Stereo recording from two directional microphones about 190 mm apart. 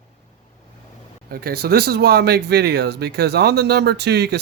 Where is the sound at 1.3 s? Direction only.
55° right (ahead or behind).